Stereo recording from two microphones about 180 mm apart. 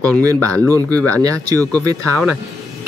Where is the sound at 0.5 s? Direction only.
10° left (ahead or behind).